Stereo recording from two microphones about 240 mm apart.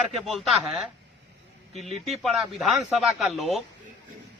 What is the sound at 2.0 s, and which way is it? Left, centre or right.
Speech, centre.